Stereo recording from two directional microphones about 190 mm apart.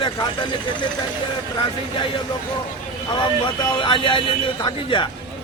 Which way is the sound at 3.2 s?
25° left (ahead or behind).